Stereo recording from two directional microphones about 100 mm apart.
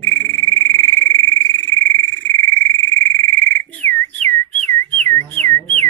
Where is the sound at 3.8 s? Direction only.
20° left (ahead or behind).